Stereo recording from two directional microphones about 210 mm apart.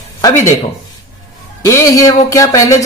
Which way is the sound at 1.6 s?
15° left (ahead or behind).